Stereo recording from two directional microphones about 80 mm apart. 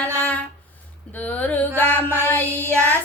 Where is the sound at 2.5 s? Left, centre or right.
Right.